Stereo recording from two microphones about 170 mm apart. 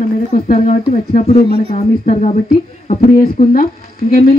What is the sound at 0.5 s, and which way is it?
Speech, 40° left (ahead or behind).